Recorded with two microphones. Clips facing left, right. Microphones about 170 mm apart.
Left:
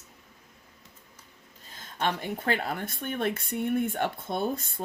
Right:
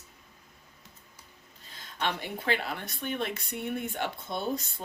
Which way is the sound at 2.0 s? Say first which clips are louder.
Left 3 dB; 50° left (ahead or behind).